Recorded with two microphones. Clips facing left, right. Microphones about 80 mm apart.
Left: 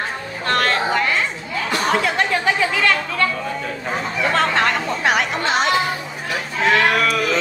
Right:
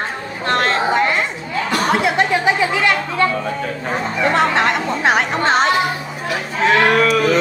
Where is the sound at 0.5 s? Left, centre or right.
Right.